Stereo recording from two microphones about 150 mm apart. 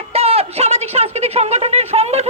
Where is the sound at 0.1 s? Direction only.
40° right (ahead or behind).